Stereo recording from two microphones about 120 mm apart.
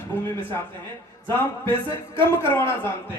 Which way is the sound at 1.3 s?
20° left (ahead or behind).